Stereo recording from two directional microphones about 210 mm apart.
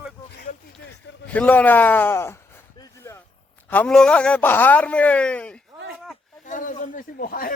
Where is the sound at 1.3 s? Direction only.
5° left (ahead or behind).